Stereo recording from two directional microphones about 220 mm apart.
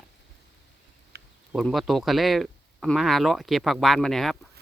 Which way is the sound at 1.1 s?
50° right (ahead or behind).